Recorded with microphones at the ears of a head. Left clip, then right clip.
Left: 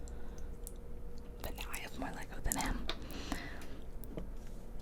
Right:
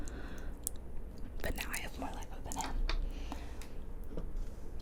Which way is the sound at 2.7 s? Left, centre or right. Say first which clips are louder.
Left 2 dB; left.